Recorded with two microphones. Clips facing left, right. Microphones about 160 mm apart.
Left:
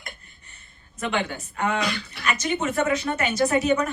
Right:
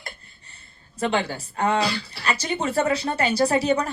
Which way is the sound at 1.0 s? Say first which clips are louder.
Right 3 dB; 35° right (ahead or behind).